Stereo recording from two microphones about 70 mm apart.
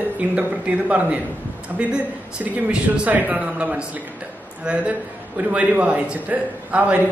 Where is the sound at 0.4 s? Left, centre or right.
Centre.